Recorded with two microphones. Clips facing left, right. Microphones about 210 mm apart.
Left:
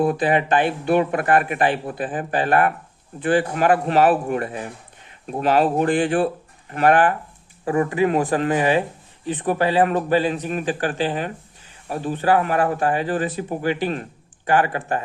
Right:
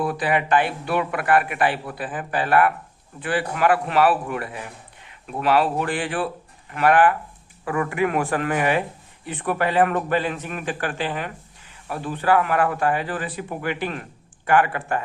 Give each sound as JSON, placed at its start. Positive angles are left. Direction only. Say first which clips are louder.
{"t": 0.2, "sound": "speech", "louder": "left 2 dB", "side_deg": 25}
{"t": 0.6, "sound": "a man's voice", "louder": "left 5 dB", "side_deg": 40}
{"t": 7.6, "sound": "a man's voice", "louder": "left 4 dB", "side_deg": 30}